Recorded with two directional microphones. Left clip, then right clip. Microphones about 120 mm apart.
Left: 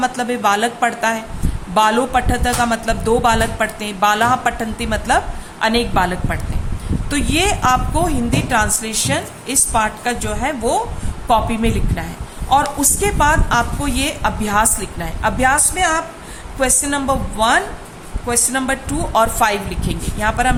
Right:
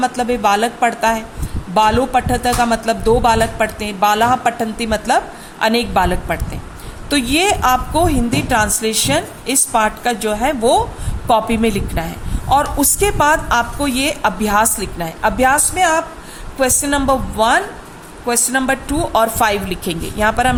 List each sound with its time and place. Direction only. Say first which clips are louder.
0.0 s a woman's voice: right 2 dB; 25° right (ahead or behind); by 10.8 s 45° right (ahead or behind)
11.3 s a woman's voice: right 2 dB; 55° right (ahead or behind)